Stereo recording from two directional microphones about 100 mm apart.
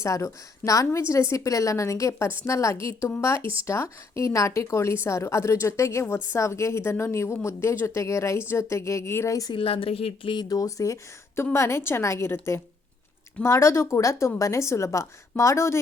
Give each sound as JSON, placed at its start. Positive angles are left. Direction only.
{"t": 0.0, "sound": "a woman's voice", "side_deg": 30}
{"t": 9.5, "sound": "speech", "side_deg": 65}
{"t": 10.3, "sound": "a woman's voice", "side_deg": 35}